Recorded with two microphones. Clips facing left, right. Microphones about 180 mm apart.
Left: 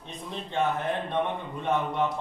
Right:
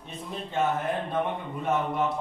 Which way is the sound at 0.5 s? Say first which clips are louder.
Even; 5° right (ahead or behind).